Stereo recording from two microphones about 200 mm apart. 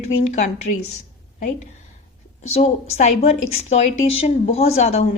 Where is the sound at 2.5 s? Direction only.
30° left (ahead or behind).